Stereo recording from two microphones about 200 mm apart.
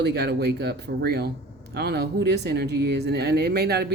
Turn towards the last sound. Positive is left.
turn(degrees=-55)  # may be behind; listen again after turning